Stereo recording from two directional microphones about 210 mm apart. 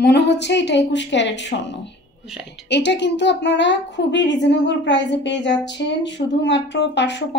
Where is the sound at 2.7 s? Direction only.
55° left (ahead or behind).